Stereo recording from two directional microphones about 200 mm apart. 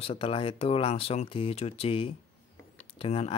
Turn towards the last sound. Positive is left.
turn(degrees=30)  # may be behind; listen again after turning